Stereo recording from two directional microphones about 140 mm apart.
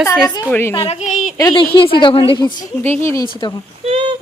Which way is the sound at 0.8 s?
50° left (ahead or behind).